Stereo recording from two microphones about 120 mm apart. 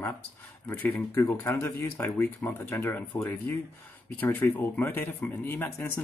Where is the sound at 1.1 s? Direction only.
20° left (ahead or behind).